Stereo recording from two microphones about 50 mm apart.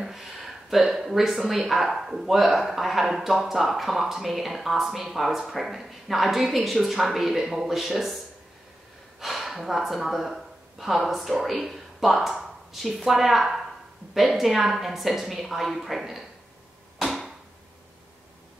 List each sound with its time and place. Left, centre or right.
0.0 s speech: centre
9.2 s speech: centre